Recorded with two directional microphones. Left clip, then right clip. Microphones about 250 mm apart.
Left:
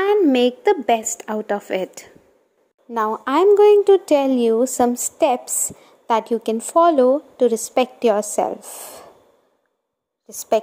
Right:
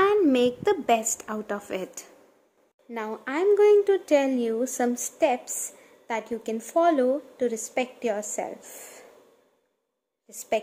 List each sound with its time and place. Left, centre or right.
0.0 s a woman's voice: centre
10.2 s a woman's voice: left